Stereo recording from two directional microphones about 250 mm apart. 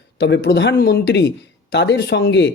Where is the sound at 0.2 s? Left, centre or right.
Left.